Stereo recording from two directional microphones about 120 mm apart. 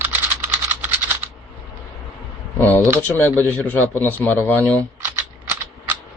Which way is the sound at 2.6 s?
15° left (ahead or behind).